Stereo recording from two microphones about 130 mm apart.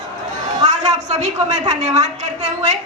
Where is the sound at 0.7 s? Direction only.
60° right (ahead or behind).